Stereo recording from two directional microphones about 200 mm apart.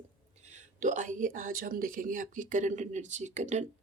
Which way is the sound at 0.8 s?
40° right (ahead or behind).